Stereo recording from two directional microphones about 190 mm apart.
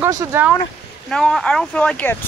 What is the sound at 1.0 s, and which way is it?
Speech, 5° left (ahead or behind).